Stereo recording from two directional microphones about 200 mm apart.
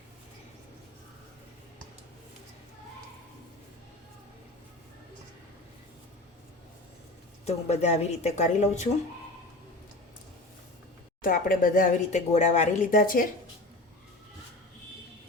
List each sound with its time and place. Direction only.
7.4 s speech: 35° left (ahead or behind)
11.2 s speech: 45° left (ahead or behind)